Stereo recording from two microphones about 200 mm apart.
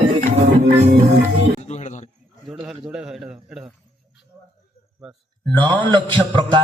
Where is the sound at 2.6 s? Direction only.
5° right (ahead or behind).